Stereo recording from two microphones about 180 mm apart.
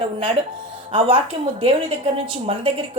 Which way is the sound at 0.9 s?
30° right (ahead or behind).